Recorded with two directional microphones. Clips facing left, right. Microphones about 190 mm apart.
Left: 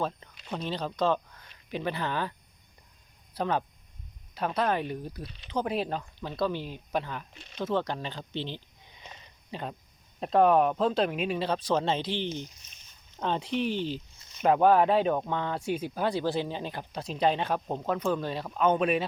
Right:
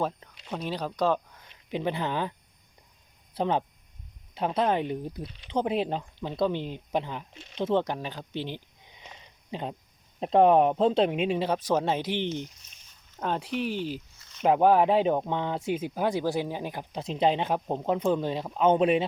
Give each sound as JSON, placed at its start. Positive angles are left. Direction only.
{"t": 0.5, "sound": "speech", "side_deg": -10}
{"t": 3.3, "sound": "speech", "side_deg": -20}
{"t": 13.1, "sound": "speech", "side_deg": -5}